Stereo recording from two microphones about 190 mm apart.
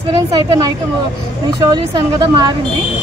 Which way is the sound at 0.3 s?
20° right (ahead or behind).